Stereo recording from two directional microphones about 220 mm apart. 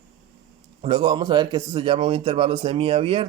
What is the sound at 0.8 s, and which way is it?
A man's voice, 20° right (ahead or behind).